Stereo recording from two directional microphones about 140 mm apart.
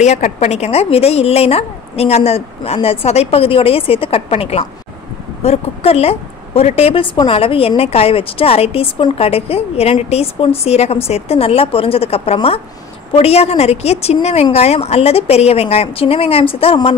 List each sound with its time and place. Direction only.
0.0 s a woman's voice: 55° left (ahead or behind)